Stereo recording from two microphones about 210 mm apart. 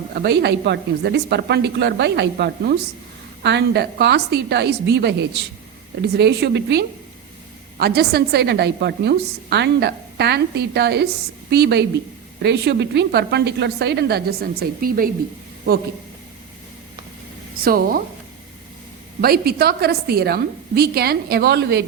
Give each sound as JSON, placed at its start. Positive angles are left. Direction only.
{"t": 0.1, "sound": "a woman's voice", "side_deg": -50}
{"t": 17.6, "sound": "a woman's voice", "side_deg": -45}
{"t": 19.2, "sound": "a woman's voice", "side_deg": -45}